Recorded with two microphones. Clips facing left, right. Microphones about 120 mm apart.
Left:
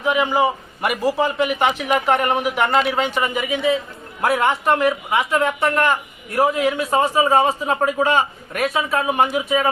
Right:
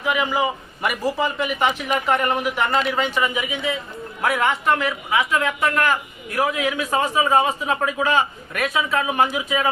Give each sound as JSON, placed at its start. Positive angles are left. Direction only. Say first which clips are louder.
{"t": 0.0, "sound": "speech", "louder": "left 3 dB", "side_deg": 25}
{"t": 1.0, "sound": "speech", "louder": "left 4 dB", "side_deg": 5}
{"t": 1.5, "sound": "speech", "louder": "left 3 dB", "side_deg": 30}